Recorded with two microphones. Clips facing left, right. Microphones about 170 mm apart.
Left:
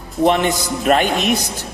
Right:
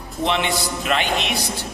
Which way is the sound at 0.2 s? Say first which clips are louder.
Left 6 dB; 45° left (ahead or behind).